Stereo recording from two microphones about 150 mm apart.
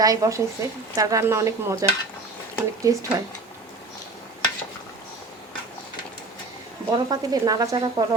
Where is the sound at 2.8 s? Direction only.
20° right (ahead or behind).